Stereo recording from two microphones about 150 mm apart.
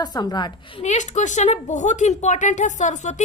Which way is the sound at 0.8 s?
50° left (ahead or behind).